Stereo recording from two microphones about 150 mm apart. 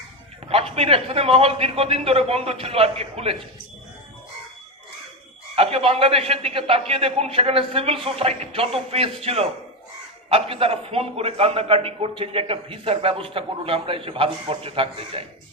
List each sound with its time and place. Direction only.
0.8 s a man's voice: 40° right (ahead or behind)
5.5 s a man's voice: 40° right (ahead or behind)